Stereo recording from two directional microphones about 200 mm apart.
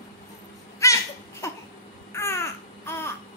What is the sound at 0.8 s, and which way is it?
Crying, 15° left (ahead or behind).